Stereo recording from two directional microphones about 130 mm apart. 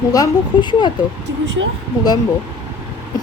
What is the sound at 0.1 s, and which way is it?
Speech, 35° left (ahead or behind).